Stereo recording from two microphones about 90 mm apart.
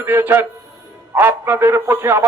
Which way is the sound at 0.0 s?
25° right (ahead or behind).